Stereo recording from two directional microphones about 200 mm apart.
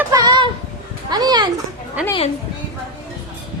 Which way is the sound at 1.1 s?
20° right (ahead or behind).